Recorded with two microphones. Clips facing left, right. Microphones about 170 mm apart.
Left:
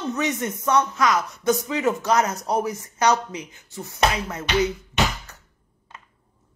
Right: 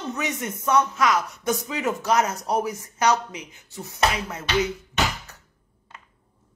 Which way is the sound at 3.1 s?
35° left (ahead or behind).